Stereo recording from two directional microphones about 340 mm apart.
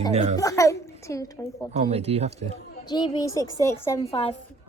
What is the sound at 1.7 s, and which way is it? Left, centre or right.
Speech, centre.